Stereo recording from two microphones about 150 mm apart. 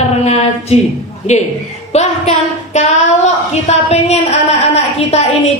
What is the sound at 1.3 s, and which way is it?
A woman's voice, 50° left (ahead or behind).